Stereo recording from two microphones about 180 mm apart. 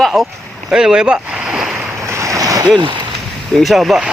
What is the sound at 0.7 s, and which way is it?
Boat, 5° right (ahead or behind).